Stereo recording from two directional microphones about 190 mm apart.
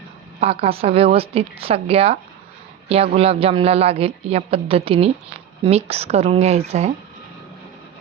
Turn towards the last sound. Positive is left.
turn(degrees=-35)  # may be behind; listen again after turning